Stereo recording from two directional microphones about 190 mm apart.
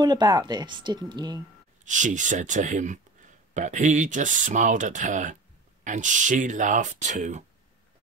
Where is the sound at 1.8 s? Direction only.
40° right (ahead or behind).